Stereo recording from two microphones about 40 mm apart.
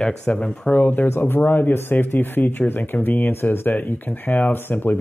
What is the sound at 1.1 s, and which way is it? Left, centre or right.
Speech, left.